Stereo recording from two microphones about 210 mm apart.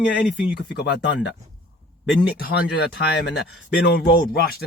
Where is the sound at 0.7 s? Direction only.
55° left (ahead or behind).